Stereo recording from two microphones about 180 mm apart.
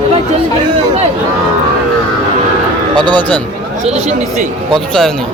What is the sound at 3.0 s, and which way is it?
Speech, 25° right (ahead or behind).